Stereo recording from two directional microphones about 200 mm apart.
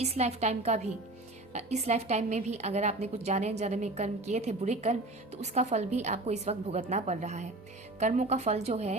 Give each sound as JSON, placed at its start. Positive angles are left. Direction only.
{"t": 0.0, "sound": "a woman's voice", "side_deg": -35}